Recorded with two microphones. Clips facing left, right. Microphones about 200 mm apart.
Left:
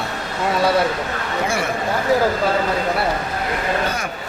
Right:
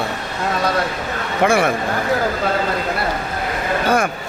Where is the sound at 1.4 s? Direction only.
60° right (ahead or behind).